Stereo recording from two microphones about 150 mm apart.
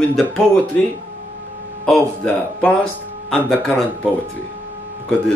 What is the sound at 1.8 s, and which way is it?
A man's voice, 5° left (ahead or behind).